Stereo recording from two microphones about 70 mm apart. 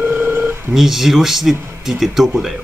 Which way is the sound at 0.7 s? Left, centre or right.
Centre.